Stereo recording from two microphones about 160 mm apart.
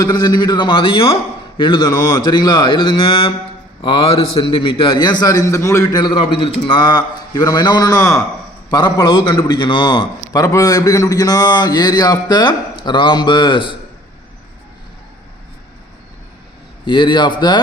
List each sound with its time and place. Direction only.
0.0 s a man's voice: 25° left (ahead or behind)
16.8 s a man's voice: 30° left (ahead or behind)